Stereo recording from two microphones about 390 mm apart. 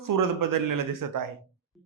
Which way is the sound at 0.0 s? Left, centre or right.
Right.